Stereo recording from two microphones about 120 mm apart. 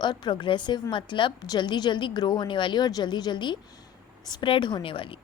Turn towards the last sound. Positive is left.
turn(degrees=45)  # may be behind; listen again after turning